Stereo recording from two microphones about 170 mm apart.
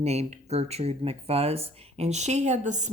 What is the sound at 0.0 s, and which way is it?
Speech, 40° right (ahead or behind).